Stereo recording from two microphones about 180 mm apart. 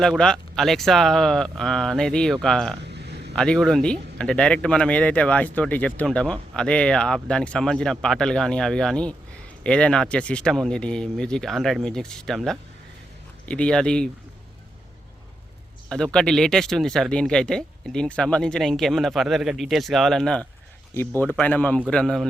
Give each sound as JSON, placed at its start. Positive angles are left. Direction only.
{"t": 0.0, "sound": "speech", "side_deg": 5}
{"t": 2.8, "sound": "a sound", "side_deg": -70}
{"t": 3.3, "sound": "speech", "side_deg": 5}
{"t": 16.1, "sound": "speech", "side_deg": 5}